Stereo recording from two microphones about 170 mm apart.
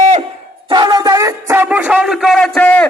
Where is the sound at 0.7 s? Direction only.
25° right (ahead or behind); by 2.9 s 10° left (ahead or behind).